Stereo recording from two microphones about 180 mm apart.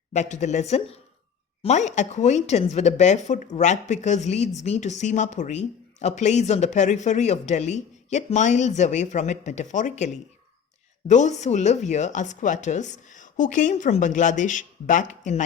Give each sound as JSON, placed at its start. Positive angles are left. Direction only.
{"t": 0.1, "sound": "speech", "side_deg": 40}
{"t": 11.1, "sound": "speech", "side_deg": 40}